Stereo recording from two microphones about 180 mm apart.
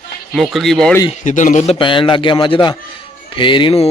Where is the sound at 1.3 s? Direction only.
45° left (ahead or behind).